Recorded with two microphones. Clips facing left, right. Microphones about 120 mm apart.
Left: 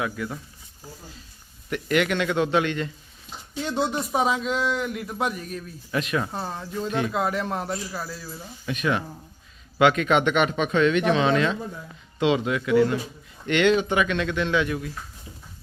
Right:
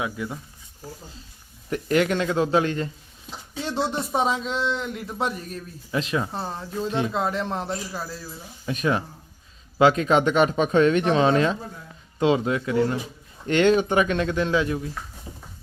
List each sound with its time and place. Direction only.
0.0 s speech: 15° right (ahead or behind)
1.7 s speech: 35° right (ahead or behind)
3.6 s a man's voice: centre (ahead or behind)
5.9 s speech: 25° right (ahead or behind)
6.2 s a man's voice: centre (ahead or behind)
6.8 s speech: 30° right (ahead or behind)
7.1 s a man's voice: 5° left (ahead or behind)
8.6 s speech: 35° right (ahead or behind)